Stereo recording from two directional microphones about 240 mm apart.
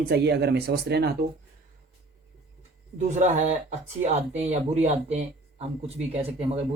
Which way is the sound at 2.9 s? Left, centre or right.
Right.